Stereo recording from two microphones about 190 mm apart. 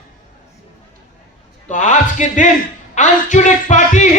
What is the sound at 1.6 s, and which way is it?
Speech, 40° left (ahead or behind).